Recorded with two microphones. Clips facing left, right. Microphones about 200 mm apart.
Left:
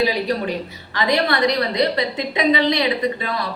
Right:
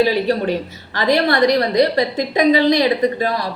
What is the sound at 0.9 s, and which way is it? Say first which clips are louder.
A woman's voice: right 4 dB; 45° right (ahead or behind).